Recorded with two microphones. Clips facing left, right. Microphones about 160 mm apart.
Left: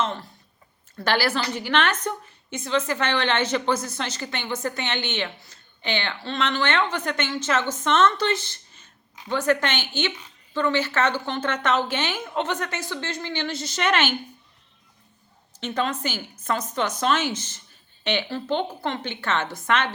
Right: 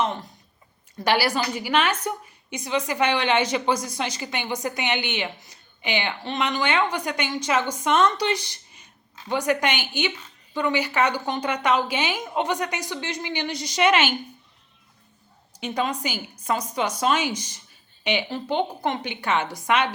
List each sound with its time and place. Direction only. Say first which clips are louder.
0.0 s a sound: right 1 dB; 15° right (ahead or behind)
0.9 s a woman's voice: right 1 dB; 10° right (ahead or behind)
15.6 s a woman's voice: even; 10° right (ahead or behind)